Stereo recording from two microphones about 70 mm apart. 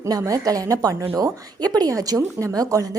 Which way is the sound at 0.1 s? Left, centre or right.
Right.